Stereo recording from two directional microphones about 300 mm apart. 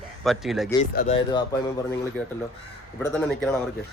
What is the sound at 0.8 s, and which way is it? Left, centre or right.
Speech, left.